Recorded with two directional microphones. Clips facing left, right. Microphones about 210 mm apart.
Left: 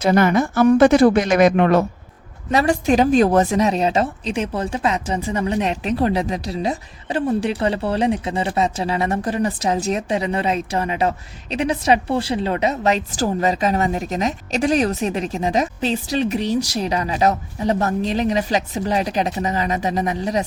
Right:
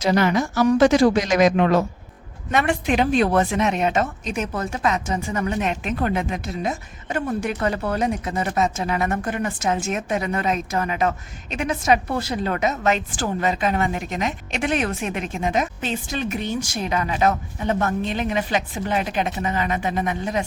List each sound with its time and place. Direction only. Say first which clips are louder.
0.0 s speech: left 3 dB; 50° left (ahead or behind)
2.5 s a woman's voice: left 4 dB; 35° left (ahead or behind)